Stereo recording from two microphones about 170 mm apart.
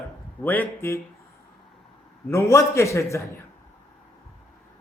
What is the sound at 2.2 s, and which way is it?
Speech, 15° left (ahead or behind).